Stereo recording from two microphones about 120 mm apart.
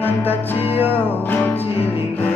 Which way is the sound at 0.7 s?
15° right (ahead or behind).